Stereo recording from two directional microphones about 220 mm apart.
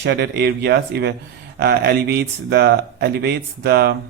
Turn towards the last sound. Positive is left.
turn(degrees=-45)  # may be behind; listen again after turning